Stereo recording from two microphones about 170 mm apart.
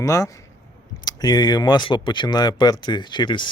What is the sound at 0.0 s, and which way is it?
Speech, 20° left (ahead or behind).